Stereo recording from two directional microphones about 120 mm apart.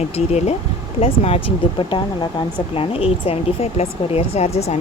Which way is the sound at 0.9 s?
55° left (ahead or behind).